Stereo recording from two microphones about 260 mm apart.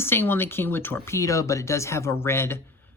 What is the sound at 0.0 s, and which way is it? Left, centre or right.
Speech, centre.